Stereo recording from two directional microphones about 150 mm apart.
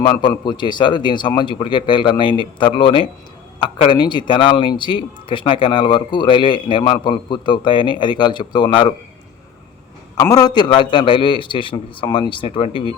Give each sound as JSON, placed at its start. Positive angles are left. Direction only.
{"t": 0.0, "sound": "speech", "side_deg": 30}
{"t": 10.2, "sound": "speech", "side_deg": 25}